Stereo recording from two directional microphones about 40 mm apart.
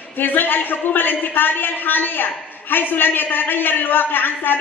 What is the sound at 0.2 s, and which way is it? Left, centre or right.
A man's voice, left.